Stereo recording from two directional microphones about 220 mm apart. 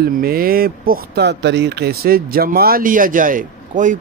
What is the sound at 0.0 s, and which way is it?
Speech, 45° right (ahead or behind).